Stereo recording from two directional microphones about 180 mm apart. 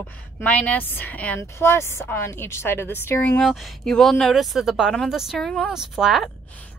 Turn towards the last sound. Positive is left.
turn(degrees=0)  # may be behind; listen again after turning